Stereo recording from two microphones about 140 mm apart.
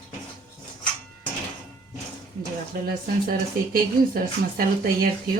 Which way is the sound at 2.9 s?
90° right.